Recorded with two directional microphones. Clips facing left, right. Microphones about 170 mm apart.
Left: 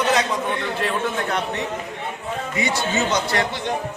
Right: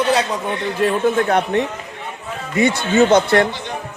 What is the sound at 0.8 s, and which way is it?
A man's voice, 50° right (ahead or behind).